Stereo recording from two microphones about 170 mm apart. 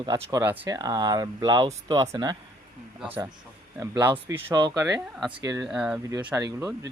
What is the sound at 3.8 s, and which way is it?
Speech, 25° right (ahead or behind).